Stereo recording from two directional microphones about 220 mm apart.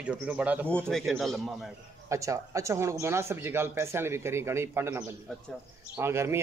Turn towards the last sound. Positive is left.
turn(degrees=-10)  # may be behind; listen again after turning